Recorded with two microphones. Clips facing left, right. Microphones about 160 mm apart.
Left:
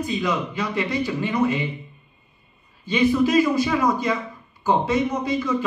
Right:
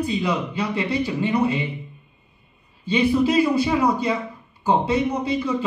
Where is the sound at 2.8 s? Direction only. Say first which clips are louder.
Even; 30° right (ahead or behind).